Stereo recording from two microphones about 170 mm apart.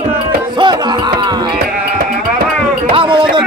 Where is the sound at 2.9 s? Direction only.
30° right (ahead or behind).